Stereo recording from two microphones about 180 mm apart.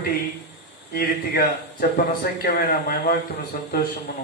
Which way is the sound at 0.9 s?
65° left (ahead or behind).